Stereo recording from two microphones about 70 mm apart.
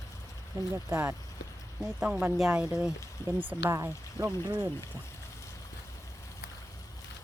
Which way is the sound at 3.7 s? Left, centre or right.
Right.